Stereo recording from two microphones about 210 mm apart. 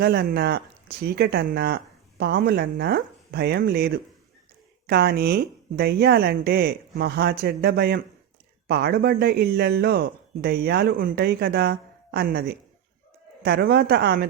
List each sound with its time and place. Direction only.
0.0 s speech: 50° right (ahead or behind)